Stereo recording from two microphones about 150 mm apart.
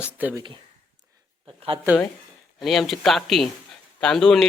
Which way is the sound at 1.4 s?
35° right (ahead or behind).